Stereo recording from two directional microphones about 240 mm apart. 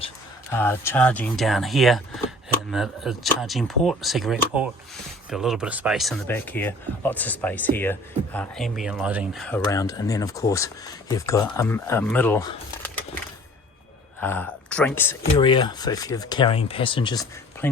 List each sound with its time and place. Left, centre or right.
0.5 s speech: centre
9.7 s speech: centre
14.2 s speech: centre
15.3 s speech: centre
17.6 s speech: centre